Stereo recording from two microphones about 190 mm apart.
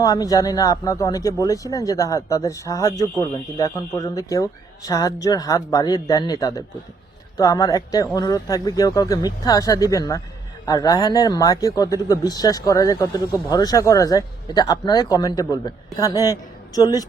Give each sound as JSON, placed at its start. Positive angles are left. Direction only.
{"t": 0.0, "sound": "speech", "side_deg": 20}